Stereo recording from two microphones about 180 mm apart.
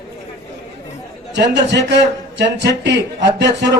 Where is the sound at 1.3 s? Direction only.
70° right (ahead or behind).